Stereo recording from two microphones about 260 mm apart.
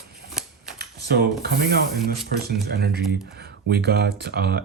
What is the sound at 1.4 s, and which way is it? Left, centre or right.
Speech, right.